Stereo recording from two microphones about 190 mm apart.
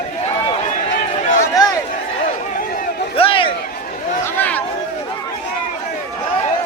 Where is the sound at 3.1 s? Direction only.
30° left (ahead or behind).